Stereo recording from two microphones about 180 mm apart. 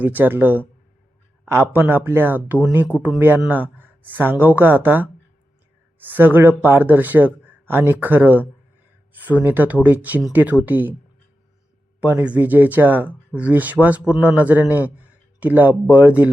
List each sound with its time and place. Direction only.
0.0 s speech: 10° right (ahead or behind)
11.9 s speech: 10° right (ahead or behind)